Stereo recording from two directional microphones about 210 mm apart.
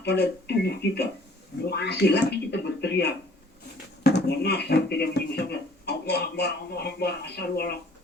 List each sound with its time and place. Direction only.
0.0 s speech: 50° left (ahead or behind)